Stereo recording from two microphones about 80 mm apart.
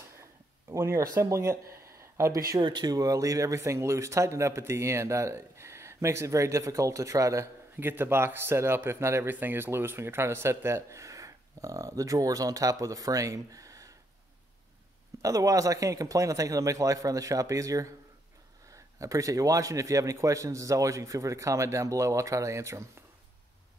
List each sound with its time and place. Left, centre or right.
0.2 s a sound: right
1.2 s speech: right
2.6 s speech: right
7.7 s speech: right
15.2 s speech: right